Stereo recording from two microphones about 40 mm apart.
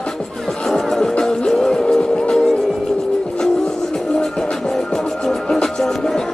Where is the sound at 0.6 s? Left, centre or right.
Centre.